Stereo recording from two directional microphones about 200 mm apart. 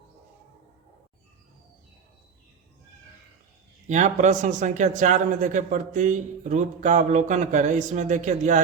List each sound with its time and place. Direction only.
3.8 s a man's voice: 35° right (ahead or behind)